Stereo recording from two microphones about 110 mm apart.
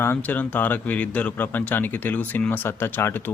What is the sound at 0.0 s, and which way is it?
Speech, 15° left (ahead or behind).